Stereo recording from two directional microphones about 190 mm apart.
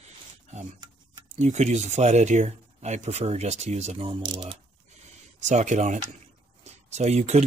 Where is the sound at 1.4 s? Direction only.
35° right (ahead or behind).